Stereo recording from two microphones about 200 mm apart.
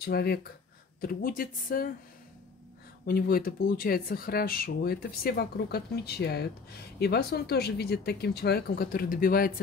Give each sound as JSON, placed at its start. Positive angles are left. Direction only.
{"t": 0.0, "sound": "speech", "side_deg": 50}
{"t": 3.1, "sound": "speech", "side_deg": 50}